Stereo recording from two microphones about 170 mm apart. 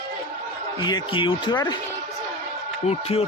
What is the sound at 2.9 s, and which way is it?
Speech, 35° left (ahead or behind).